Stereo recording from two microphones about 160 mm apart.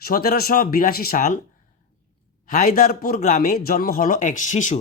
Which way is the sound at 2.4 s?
55° left (ahead or behind).